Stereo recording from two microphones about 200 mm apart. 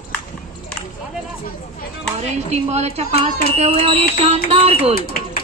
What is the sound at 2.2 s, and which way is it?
A woman's voice, 35° right (ahead or behind).